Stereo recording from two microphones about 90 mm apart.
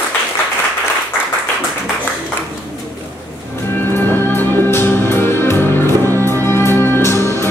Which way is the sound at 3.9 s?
25° left (ahead or behind).